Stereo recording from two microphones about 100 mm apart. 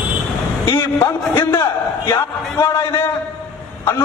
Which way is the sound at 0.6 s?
25° left (ahead or behind).